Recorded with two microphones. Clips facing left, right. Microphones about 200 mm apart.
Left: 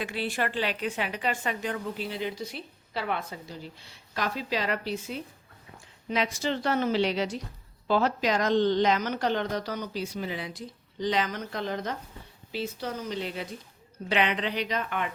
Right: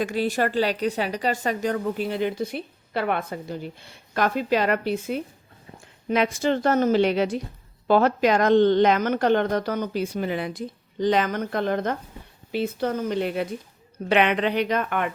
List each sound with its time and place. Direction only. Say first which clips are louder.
0.0 s a woman's voice: right 7 dB; 45° right (ahead or behind)